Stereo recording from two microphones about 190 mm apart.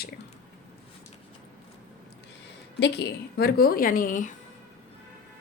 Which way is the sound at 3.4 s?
55° left (ahead or behind).